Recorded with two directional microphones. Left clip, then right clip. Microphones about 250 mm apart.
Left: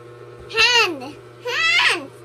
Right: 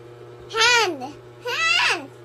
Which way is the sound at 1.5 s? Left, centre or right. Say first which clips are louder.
Left 3 dB; centre.